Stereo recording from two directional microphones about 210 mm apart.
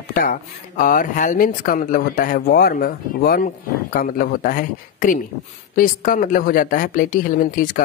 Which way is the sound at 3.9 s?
45° left (ahead or behind).